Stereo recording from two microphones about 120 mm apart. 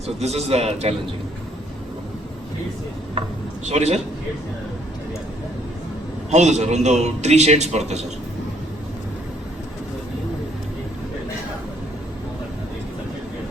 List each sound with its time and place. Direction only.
0.2 s a man's voice: 65° right (ahead or behind)
3.7 s a man's voice: 65° right (ahead or behind)
6.3 s a man's voice: 75° right (ahead or behind)